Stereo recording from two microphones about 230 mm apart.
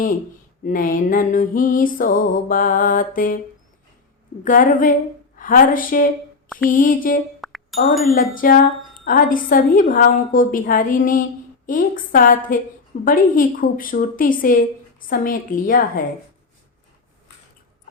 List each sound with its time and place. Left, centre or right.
0.6 s a woman's voice: left
4.4 s a woman's voice: left
7.4 s a sound: centre
8.4 s a woman's voice: left